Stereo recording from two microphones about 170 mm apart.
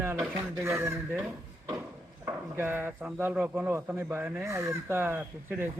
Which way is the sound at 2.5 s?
15° right (ahead or behind).